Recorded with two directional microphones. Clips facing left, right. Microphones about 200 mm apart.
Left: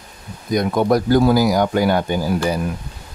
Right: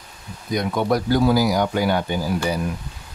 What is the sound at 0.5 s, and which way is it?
Speech, 45° left (ahead or behind).